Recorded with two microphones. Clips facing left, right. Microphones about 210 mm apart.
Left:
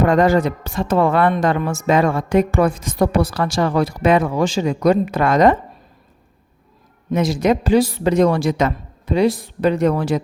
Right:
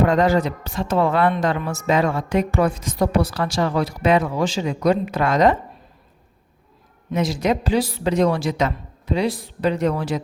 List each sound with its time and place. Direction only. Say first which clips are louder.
0.0 s a woman's voice: left 3 dB; 50° left (ahead or behind)
7.1 s a woman's voice: left 4 dB; 50° left (ahead or behind)